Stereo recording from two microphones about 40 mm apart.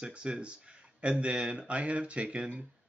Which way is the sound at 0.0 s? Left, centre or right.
Right.